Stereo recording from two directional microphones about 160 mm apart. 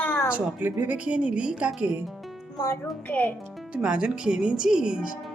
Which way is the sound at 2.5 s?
20° left (ahead or behind).